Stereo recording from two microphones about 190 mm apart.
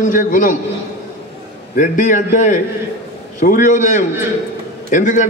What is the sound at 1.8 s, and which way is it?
A man's voice, 40° left (ahead or behind).